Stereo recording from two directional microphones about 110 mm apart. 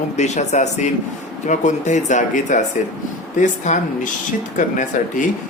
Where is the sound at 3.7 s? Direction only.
90° left.